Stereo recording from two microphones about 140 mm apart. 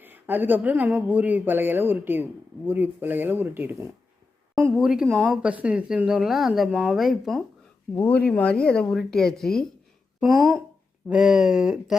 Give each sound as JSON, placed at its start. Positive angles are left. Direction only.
{"t": 0.0, "sound": "speech", "side_deg": -15}
{"t": 5.0, "sound": "speech", "side_deg": -15}
{"t": 7.9, "sound": "speech", "side_deg": 10}
{"t": 11.1, "sound": "speech", "side_deg": -5}